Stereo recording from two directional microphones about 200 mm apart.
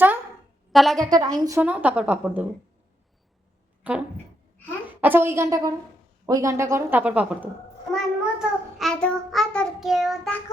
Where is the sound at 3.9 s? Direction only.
5° right (ahead or behind).